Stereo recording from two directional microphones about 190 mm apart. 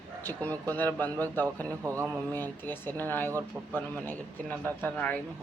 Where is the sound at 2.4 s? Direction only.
10° left (ahead or behind).